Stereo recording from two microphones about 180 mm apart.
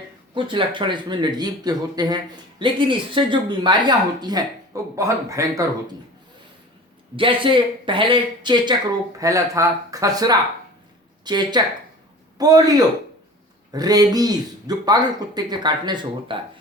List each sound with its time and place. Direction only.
0.3 s speech: 25° right (ahead or behind)
7.2 s speech: 30° right (ahead or behind)